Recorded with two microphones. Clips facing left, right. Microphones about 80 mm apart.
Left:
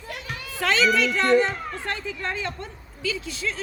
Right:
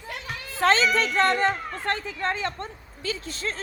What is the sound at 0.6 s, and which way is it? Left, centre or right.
Speech, right.